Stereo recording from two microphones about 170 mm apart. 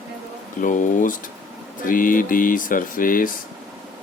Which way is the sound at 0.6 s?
50° left (ahead or behind).